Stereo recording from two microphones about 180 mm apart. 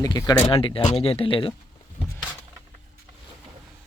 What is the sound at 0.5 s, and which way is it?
Speech, 30° left (ahead or behind).